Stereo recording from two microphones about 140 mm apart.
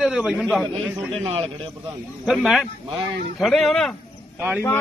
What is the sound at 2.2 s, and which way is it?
A man's voice, centre (ahead or behind).